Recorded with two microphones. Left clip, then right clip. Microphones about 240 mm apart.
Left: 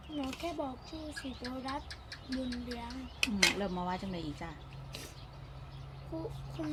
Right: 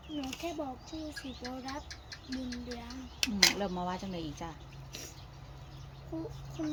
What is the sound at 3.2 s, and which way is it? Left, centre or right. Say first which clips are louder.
Speech: right 2 dB; centre.